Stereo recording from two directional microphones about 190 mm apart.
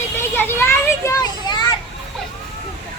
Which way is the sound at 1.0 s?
20° left (ahead or behind).